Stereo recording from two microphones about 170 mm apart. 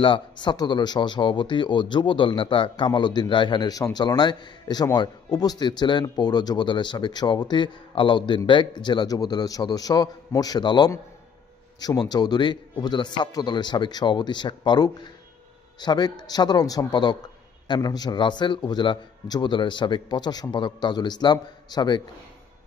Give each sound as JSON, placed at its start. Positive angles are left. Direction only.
{"t": 0.0, "sound": "speech", "side_deg": 30}